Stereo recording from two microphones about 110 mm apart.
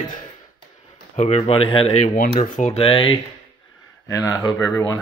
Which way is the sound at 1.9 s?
85° left.